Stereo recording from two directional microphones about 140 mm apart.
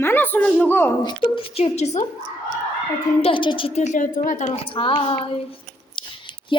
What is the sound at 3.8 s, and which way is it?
Speech, 60° left (ahead or behind).